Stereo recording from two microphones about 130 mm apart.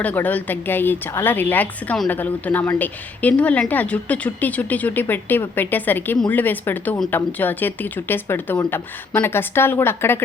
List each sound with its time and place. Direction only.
0.0 s speech: 10° left (ahead or behind)